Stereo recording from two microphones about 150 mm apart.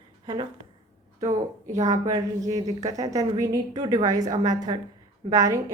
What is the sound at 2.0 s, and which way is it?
Speech, 25° right (ahead or behind).